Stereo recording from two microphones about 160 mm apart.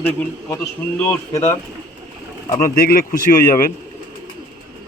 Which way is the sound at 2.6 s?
70° left (ahead or behind).